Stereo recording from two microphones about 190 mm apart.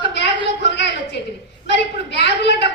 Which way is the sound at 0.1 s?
65° left (ahead or behind).